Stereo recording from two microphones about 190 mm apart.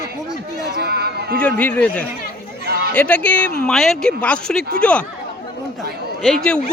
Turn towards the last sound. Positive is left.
turn(degrees=5)  # may be behind; listen again after turning